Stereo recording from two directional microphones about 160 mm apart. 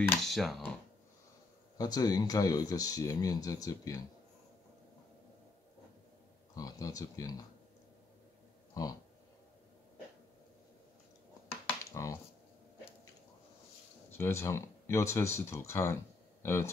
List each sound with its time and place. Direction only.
0.0 s speech: centre (ahead or behind)
1.8 s speech: 25° left (ahead or behind)
6.5 s speech: 20° left (ahead or behind)
8.8 s speech: 25° left (ahead or behind)
11.8 s computer keyboard: 20° left (ahead or behind)
14.1 s speech: 15° left (ahead or behind)